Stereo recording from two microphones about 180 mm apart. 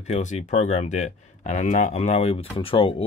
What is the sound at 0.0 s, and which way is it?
Speech, 40° left (ahead or behind).